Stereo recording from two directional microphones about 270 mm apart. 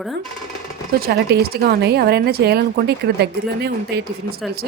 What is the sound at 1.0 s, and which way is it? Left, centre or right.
Speech, right.